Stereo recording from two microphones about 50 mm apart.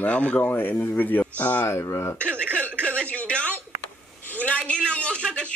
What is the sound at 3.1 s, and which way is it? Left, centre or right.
Speech, left.